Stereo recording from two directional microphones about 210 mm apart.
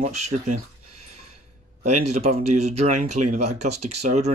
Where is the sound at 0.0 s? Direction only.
30° right (ahead or behind).